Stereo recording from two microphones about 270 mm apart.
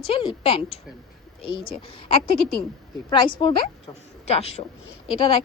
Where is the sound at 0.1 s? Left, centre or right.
Centre.